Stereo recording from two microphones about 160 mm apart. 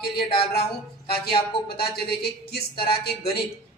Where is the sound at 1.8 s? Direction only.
80° left.